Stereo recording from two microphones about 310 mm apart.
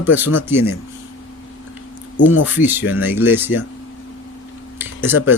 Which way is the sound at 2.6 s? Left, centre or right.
Centre.